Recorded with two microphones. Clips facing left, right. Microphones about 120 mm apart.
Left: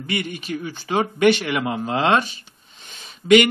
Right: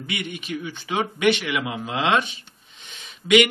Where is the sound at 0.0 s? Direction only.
40° left (ahead or behind).